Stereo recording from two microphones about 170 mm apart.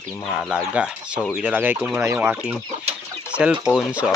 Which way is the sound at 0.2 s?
Centre (ahead or behind).